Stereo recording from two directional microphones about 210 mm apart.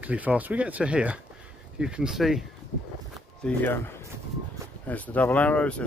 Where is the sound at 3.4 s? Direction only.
10° left (ahead or behind).